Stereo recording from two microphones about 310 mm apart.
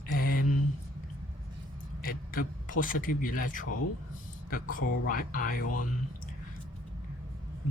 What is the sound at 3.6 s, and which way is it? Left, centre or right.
Speech, left.